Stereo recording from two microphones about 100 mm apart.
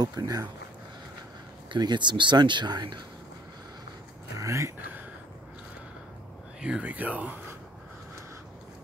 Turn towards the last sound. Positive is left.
turn(degrees=-15)  # may be behind; listen again after turning